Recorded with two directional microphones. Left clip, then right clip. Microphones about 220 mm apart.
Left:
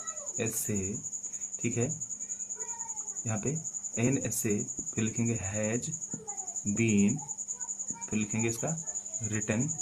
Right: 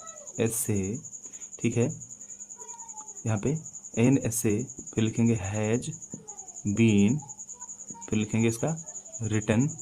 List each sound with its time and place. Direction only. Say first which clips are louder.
0.3 s speech: right 6 dB; 50° right (ahead or behind)
3.2 s speech: right 6 dB; 50° right (ahead or behind)
8.1 s speech: right 5 dB; 50° right (ahead or behind)